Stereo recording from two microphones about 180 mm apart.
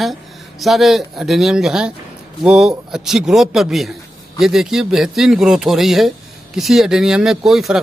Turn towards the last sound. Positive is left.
turn(degrees=0)  # may be behind; listen again after turning